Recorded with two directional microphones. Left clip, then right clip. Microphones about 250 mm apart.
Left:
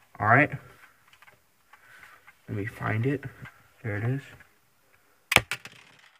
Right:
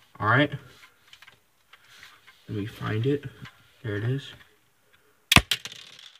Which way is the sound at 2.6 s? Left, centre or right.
Left.